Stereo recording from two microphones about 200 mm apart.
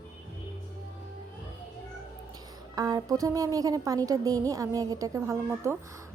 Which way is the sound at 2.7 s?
20° right (ahead or behind).